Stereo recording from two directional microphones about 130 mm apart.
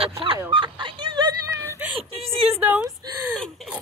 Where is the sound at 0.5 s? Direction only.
40° right (ahead or behind).